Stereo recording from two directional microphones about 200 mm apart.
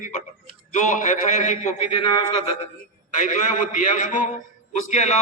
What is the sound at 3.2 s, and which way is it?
A man's voice, 40° left (ahead or behind).